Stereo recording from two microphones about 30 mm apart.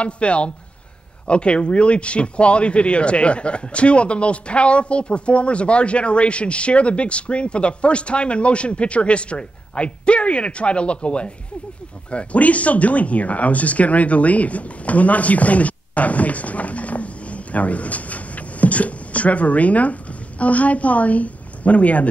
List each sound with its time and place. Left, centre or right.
0.0 s speech: left
12.4 s speech: left